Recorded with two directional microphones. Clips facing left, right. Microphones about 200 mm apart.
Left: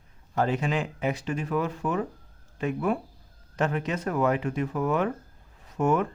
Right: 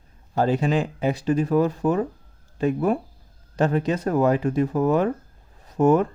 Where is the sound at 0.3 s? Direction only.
35° right (ahead or behind).